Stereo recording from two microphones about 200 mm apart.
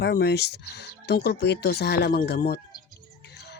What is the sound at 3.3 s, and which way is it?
Music, 55° left (ahead or behind).